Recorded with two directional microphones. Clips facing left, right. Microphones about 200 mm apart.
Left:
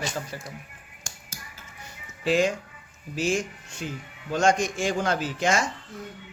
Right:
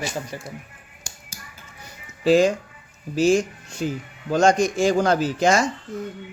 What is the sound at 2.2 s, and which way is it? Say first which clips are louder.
Speech: right 6 dB; 35° right (ahead or behind).